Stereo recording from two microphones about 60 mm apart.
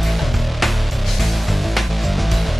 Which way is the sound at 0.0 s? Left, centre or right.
Centre.